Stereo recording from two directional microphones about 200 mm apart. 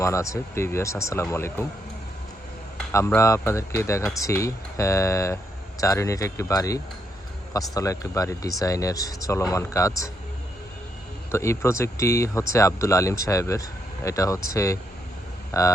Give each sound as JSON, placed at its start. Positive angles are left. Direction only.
{"t": 0.0, "sound": "speech", "side_deg": 15}
{"t": 2.9, "sound": "speech", "side_deg": 15}
{"t": 11.3, "sound": "speech", "side_deg": 15}